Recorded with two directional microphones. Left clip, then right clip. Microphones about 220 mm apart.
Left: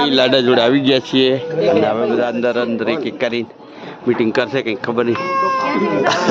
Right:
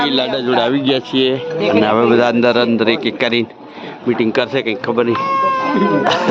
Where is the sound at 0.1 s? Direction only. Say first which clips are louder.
Left 4 dB; 40° left (ahead or behind).